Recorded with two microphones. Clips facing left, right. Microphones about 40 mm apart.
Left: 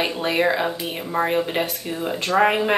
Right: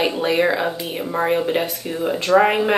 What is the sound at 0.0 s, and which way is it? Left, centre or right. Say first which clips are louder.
Speech: right 3 dB; centre.